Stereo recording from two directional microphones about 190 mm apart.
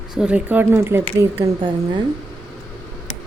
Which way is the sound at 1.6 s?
25° right (ahead or behind).